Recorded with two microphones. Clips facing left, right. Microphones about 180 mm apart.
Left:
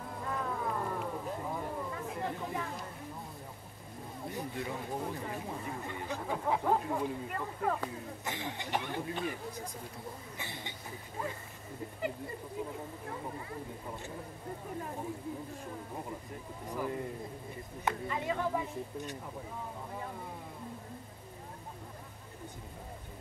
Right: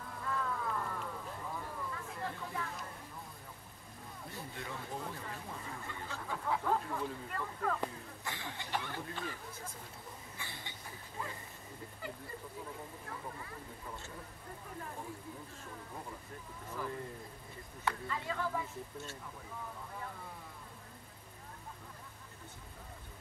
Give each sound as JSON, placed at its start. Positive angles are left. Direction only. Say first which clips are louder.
{"t": 0.1, "sound": "music", "louder": "left 1 dB", "side_deg": 25}
{"t": 1.0, "sound": "a sound", "louder": "left 6 dB", "side_deg": 25}
{"t": 4.3, "sound": "speech", "louder": "left 7 dB", "side_deg": 20}
{"t": 10.3, "sound": "cough", "louder": "left 5 dB", "side_deg": 20}
{"t": 16.6, "sound": "speech", "louder": "left 5 dB", "side_deg": 15}